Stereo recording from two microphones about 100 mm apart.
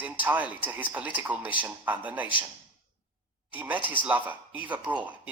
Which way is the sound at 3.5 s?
15° right (ahead or behind).